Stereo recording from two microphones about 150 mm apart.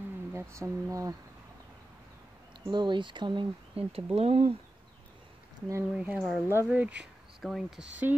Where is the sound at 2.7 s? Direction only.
30° right (ahead or behind).